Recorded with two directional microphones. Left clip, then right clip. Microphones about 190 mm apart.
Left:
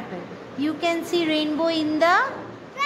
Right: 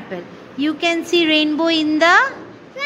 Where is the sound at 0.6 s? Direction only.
25° right (ahead or behind).